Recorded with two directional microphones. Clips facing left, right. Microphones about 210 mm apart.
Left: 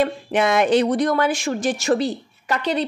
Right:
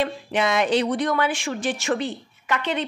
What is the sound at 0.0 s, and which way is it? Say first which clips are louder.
Speech: left 4 dB; 50° left (ahead or behind).